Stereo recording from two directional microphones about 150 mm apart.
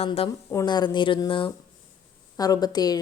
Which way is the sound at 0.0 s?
45° left (ahead or behind).